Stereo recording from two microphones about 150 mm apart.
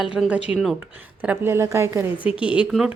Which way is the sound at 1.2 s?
15° right (ahead or behind).